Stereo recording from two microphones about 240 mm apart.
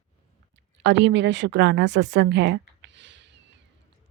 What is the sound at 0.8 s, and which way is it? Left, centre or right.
Speech, right.